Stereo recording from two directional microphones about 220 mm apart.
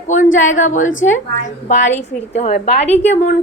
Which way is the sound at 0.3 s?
35° left (ahead or behind).